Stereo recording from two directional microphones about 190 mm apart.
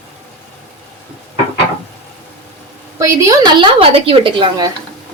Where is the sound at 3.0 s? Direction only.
15° right (ahead or behind).